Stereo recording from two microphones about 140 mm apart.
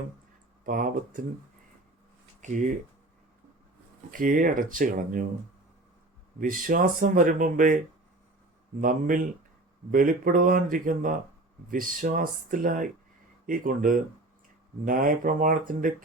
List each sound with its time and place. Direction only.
0.6 s speech: 75° right (ahead or behind)
2.4 s speech: 60° right (ahead or behind)
4.1 s speech: 75° right (ahead or behind)
6.4 s speech: 80° right
8.8 s speech: 85° right